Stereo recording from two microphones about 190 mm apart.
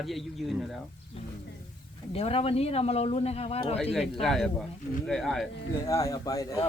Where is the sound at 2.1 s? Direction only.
30° left (ahead or behind).